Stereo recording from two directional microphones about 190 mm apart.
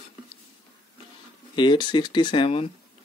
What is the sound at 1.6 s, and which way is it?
Speech, 25° left (ahead or behind).